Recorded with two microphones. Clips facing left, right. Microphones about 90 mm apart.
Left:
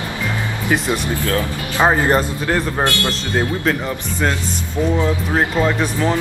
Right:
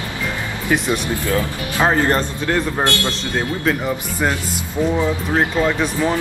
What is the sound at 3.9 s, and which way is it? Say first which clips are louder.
Speech: even; 10° right (ahead or behind).